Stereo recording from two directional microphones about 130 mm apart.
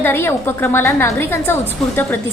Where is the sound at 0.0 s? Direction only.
20° left (ahead or behind).